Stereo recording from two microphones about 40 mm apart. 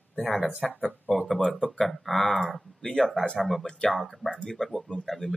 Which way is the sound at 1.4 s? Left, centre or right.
Left.